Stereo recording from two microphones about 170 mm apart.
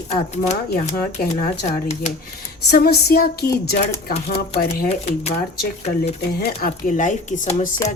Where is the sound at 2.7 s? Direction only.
65° left (ahead or behind).